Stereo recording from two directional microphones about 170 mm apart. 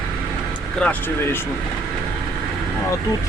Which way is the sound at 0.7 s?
5° left (ahead or behind).